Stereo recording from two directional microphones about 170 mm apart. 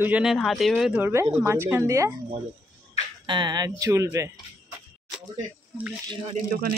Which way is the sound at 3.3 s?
25° right (ahead or behind).